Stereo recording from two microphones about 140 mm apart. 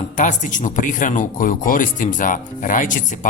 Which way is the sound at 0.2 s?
65° left (ahead or behind).